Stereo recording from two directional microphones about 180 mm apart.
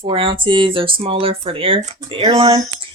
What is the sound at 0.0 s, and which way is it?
A woman's voice, 30° right (ahead or behind).